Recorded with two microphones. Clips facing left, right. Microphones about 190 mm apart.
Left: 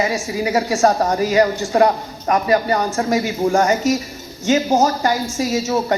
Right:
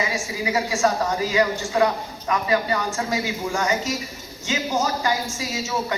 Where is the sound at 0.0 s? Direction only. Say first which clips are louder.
Left 6 dB; 40° left (ahead or behind).